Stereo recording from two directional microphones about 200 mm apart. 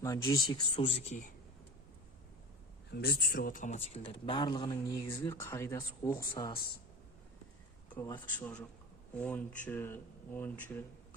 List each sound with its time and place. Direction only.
0.0 s speech: 15° left (ahead or behind); by 1.3 s 35° left (ahead or behind)
2.9 s speech: 50° left (ahead or behind); by 6.1 s 15° left (ahead or behind)
6.3 s speech: 25° left (ahead or behind)
7.9 s speech: 15° left (ahead or behind)